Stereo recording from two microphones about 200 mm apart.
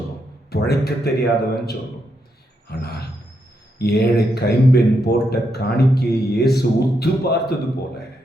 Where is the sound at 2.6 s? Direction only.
50° left (ahead or behind).